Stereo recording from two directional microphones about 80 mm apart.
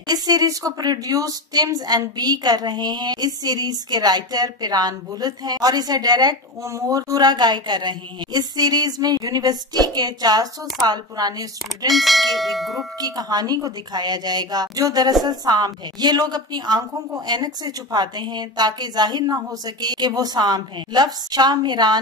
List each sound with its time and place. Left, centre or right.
0.1 s a woman's voice: right
6.7 s a woman's voice: right
11.9 s church bell: centre
13.0 s a woman's voice: right